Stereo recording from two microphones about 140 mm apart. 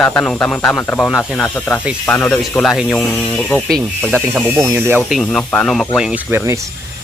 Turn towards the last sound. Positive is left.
turn(degrees=-20)  # may be behind; listen again after turning